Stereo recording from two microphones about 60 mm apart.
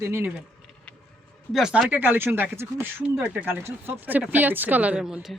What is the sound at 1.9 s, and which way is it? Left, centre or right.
Speech, right.